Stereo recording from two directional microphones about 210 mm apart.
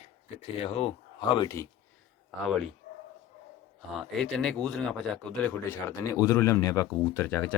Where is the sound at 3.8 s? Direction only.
Centre (ahead or behind).